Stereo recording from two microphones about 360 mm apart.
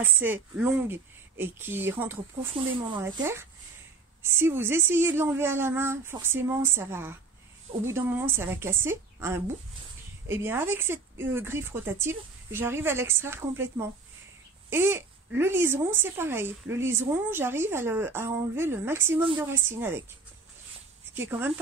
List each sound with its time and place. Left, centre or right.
0.0 s speech: centre
21.2 s speech: centre